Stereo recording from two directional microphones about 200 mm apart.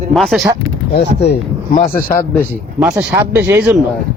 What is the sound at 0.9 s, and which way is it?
Speech, 55° left (ahead or behind).